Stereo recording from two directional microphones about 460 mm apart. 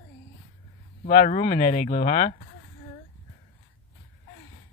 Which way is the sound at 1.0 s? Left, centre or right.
Centre.